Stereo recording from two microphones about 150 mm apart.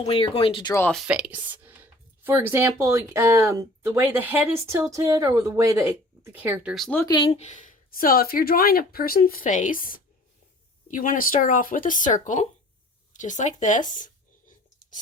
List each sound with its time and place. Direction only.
0.0 s speech: 40° left (ahead or behind)
1.0 s speech: 5° right (ahead or behind)
6.7 s speech: centre (ahead or behind)
7.0 s speech: 30° left (ahead or behind)
7.3 s speech: 50° left (ahead or behind)
13.9 s whispering: 60° left (ahead or behind)